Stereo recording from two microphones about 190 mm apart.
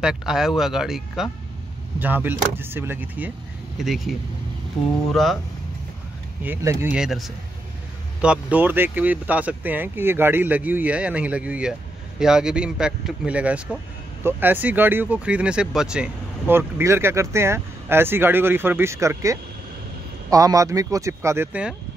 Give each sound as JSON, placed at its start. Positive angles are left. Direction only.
{"t": 0.0, "sound": "speech", "side_deg": 0}
{"t": 6.4, "sound": "speech", "side_deg": -15}